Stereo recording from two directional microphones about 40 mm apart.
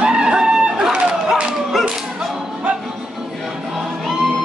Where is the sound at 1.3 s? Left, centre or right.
Centre.